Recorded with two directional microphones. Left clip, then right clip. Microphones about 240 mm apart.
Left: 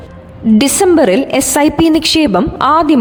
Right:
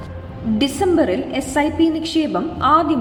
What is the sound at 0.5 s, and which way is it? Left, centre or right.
A woman's voice, left.